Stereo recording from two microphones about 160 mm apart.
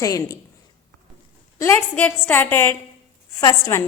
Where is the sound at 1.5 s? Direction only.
15° left (ahead or behind).